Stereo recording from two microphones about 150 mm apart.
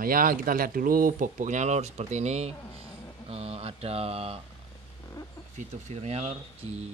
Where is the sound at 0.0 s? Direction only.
70° right (ahead or behind); by 4.4 s 40° right (ahead or behind).